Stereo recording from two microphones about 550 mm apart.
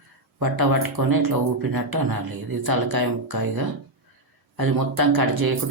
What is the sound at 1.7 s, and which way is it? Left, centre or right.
Speech, right.